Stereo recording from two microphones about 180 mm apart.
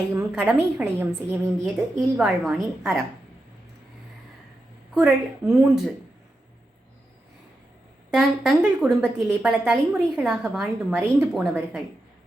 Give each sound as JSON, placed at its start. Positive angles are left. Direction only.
{"t": 0.1, "sound": "a woman's voice", "side_deg": -10}
{"t": 4.9, "sound": "a woman's voice", "side_deg": -5}
{"t": 8.1, "sound": "a woman's voice", "side_deg": -5}